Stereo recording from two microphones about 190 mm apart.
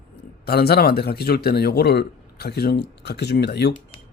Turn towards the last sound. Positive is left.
turn(degrees=60)  # may be behind; listen again after turning